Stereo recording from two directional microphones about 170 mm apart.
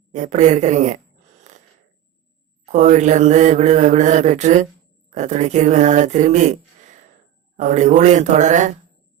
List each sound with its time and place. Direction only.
0.1 s a man's voice: 45° right (ahead or behind)
2.6 s a man's voice: 45° right (ahead or behind)